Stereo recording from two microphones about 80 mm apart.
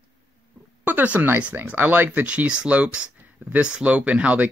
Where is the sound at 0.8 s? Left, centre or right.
Right.